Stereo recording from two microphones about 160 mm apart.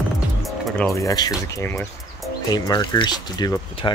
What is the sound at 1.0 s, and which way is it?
Speech, 20° left (ahead or behind).